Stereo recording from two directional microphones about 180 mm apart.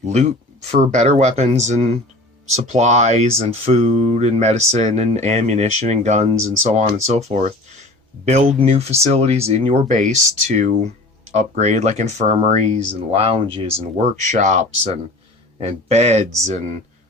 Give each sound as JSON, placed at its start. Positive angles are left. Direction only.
{"t": 0.0, "sound": "speech", "side_deg": -40}
{"t": 13.9, "sound": "speech", "side_deg": -40}